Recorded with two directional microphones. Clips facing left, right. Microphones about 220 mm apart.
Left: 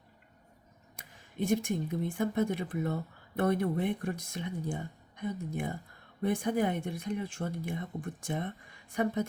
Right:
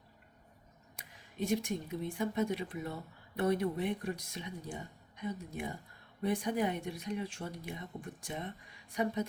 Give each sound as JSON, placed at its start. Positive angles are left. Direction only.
{"t": 1.5, "sound": "speech", "side_deg": 50}